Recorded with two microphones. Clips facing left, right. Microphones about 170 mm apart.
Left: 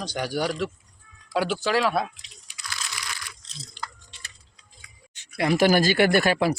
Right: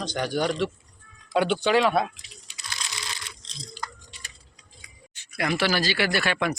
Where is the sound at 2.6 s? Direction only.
25° right (ahead or behind).